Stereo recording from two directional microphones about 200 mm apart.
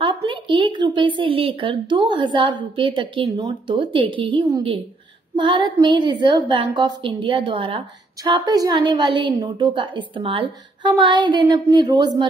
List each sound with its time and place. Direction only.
0.0 s a woman's voice: 25° right (ahead or behind)